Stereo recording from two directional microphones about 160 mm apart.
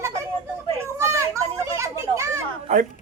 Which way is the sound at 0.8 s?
15° right (ahead or behind).